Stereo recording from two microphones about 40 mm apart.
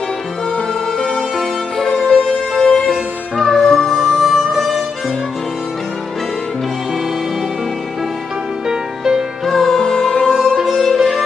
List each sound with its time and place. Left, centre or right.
0.9 s music: centre
8.6 s music: centre
9.5 s music: centre